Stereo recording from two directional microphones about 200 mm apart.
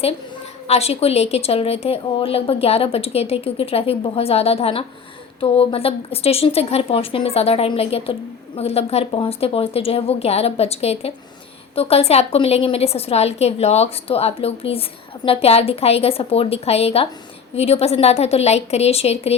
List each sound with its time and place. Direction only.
0.7 s a woman's voice: 30° left (ahead or behind)